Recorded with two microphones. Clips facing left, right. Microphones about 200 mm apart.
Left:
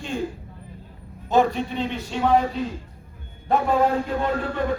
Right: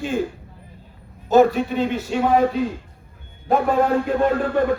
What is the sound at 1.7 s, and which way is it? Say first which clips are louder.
Speech: right 5 dB; 45° right (ahead or behind).